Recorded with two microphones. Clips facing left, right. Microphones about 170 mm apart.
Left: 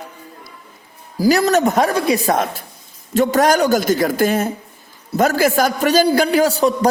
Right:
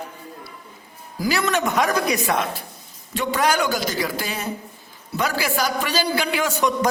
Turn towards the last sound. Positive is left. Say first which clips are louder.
# left 6 dB
turn(degrees=35)  # may be behind; listen again after turning